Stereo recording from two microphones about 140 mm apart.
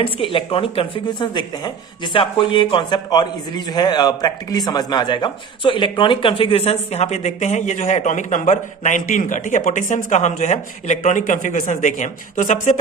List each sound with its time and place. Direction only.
0.0 s a man's voice: 40° left (ahead or behind); by 12.7 s 60° left (ahead or behind)